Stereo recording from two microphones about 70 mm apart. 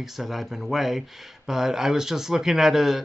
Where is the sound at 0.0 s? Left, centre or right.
Centre.